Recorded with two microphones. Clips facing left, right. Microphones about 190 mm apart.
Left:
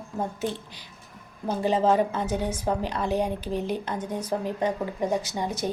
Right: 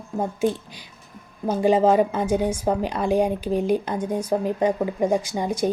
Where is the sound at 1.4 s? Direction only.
15° right (ahead or behind).